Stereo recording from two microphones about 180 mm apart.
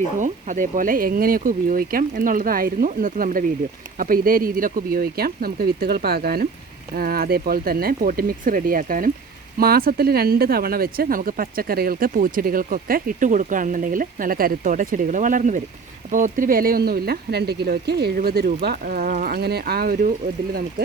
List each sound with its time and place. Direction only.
0.2 s speech: 45° right (ahead or behind)